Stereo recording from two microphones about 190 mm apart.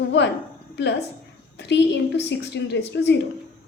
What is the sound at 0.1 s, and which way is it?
A woman's voice, 65° left (ahead or behind).